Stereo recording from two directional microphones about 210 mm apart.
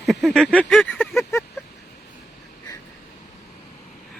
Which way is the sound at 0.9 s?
10° left (ahead or behind).